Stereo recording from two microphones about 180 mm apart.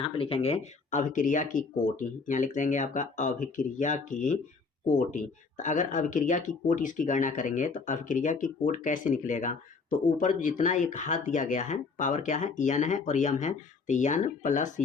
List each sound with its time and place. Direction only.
0.0 s speech: 30° left (ahead or behind)